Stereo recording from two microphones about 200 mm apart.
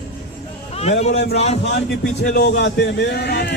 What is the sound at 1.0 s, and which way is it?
Speech, 35° left (ahead or behind).